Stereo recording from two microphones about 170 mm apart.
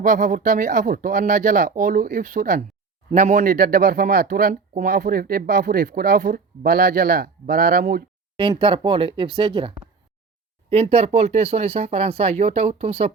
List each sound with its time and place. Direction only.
0.0 s speech: 50° right (ahead or behind)
3.1 s speech: 45° right (ahead or behind); by 8.0 s 60° right (ahead or behind)
8.4 s speech: 30° right (ahead or behind)